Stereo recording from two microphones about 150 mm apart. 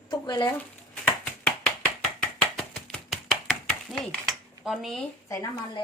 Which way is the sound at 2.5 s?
Centre (ahead or behind).